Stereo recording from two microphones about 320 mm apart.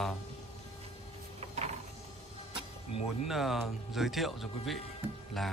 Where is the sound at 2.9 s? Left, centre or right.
Centre.